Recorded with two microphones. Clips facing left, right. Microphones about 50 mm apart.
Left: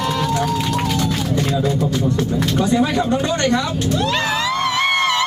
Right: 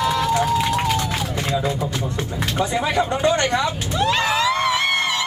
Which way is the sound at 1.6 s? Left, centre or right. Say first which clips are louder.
Left 5 dB; centre.